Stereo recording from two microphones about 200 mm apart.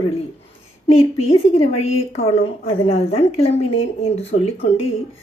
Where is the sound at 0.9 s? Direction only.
30° left (ahead or behind).